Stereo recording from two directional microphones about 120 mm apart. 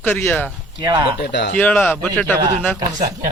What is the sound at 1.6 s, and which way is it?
Speech, 15° left (ahead or behind).